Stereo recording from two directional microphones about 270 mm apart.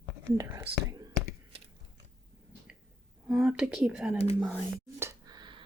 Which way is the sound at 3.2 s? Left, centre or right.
Centre.